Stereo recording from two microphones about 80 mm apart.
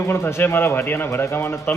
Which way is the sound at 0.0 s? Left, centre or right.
Left.